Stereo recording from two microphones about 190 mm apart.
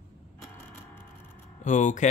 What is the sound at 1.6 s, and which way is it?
Speech, 40° left (ahead or behind).